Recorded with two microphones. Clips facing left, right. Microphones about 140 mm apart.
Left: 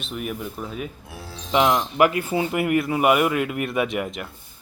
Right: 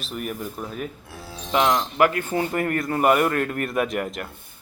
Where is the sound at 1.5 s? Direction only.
15° left (ahead or behind).